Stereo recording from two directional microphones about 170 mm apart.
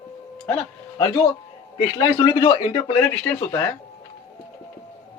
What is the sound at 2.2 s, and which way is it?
Speech, 30° left (ahead or behind).